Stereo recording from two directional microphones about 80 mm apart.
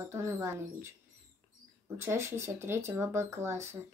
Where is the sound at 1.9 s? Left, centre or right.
Right.